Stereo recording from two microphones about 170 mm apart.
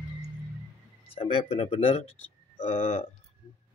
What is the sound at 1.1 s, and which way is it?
Speech, 30° left (ahead or behind).